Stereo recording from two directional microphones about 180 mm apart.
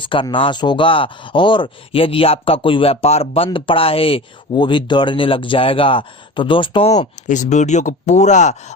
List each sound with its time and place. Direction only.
0.0 s speech: 25° left (ahead or behind)